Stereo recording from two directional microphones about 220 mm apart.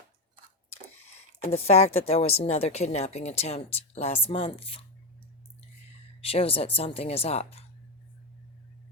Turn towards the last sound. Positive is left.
turn(degrees=25)  # may be behind; listen again after turning